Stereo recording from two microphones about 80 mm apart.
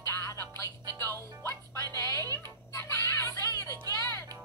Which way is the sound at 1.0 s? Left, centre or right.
Left.